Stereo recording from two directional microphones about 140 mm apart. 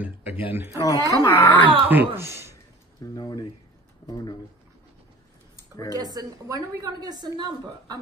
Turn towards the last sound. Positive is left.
turn(degrees=-30)  # may be behind; listen again after turning